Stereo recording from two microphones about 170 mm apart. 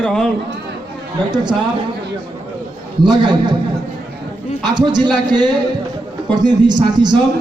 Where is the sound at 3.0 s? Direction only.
25° right (ahead or behind).